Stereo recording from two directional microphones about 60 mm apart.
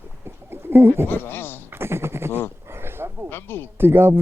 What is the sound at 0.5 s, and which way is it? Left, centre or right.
Bird, right.